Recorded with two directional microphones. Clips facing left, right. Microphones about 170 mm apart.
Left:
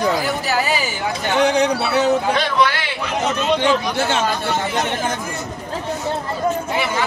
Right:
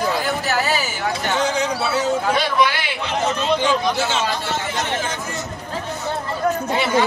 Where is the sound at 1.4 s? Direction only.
65° left (ahead or behind).